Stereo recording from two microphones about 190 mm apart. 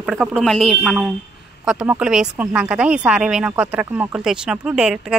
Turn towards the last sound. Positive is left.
turn(degrees=-5)  # may be behind; listen again after turning